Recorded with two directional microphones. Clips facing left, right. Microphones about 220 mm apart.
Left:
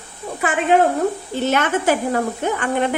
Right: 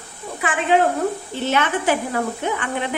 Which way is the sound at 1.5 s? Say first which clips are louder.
Left 1 dB; 45° left (ahead or behind).